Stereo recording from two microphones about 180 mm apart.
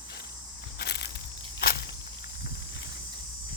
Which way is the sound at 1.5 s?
60° left (ahead or behind).